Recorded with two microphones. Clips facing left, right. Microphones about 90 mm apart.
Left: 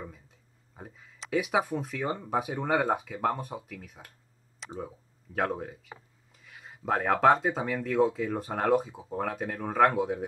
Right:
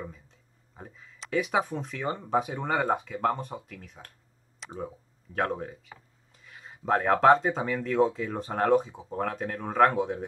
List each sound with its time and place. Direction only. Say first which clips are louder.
0.7 s speech: even; 5° left (ahead or behind)